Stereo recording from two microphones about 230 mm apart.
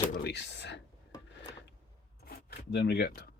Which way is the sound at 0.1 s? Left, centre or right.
Left.